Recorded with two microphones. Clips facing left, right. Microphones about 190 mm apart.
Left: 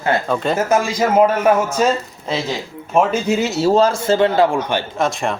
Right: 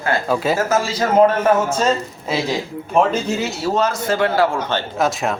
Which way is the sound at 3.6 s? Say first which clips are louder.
Left 5 dB; 30° left (ahead or behind).